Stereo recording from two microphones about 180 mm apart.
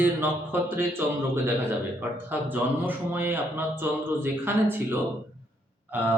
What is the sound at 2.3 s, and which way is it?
A man's voice, 10° right (ahead or behind).